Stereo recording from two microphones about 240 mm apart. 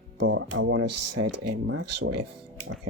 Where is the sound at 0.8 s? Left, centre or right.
Right.